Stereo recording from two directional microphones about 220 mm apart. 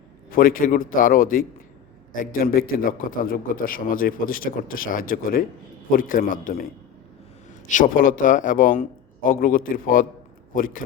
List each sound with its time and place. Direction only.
0.3 s a man's voice: 40° left (ahead or behind)
7.7 s a man's voice: 35° left (ahead or behind)